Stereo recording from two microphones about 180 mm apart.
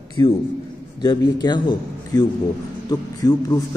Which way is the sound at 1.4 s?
25° left (ahead or behind).